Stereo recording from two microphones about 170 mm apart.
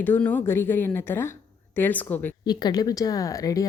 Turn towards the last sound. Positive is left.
turn(degrees=20)  # may be behind; listen again after turning